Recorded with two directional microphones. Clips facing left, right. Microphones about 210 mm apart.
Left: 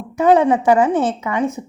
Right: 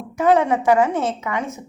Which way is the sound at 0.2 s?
30° left (ahead or behind).